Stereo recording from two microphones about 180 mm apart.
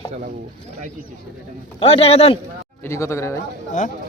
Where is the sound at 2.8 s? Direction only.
15° left (ahead or behind).